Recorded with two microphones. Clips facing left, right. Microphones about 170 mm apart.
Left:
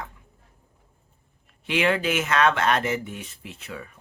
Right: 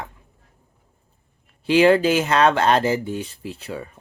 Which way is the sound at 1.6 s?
35° right (ahead or behind).